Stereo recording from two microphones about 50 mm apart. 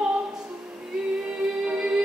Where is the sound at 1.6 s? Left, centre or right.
Centre.